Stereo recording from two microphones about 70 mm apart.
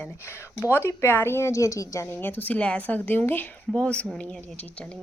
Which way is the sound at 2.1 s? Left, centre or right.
Left.